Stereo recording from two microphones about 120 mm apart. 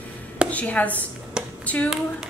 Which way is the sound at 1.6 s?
10° left (ahead or behind).